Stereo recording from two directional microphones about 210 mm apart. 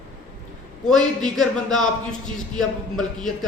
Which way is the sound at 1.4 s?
Centre (ahead or behind).